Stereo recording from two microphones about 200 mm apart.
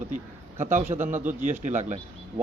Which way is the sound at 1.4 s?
35° right (ahead or behind).